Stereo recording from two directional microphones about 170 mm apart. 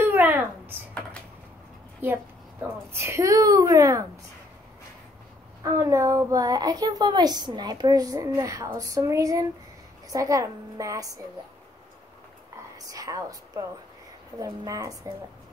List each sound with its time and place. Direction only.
0.0 s a sound: 10° right (ahead or behind)
2.0 s a woman's voice: 10° right (ahead or behind)
5.6 s a child's voice: 20° right (ahead or behind)
12.7 s a woman's voice: 20° right (ahead or behind)